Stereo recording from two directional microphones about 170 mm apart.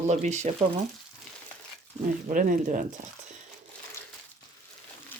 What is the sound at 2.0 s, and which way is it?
Speech, 50° right (ahead or behind).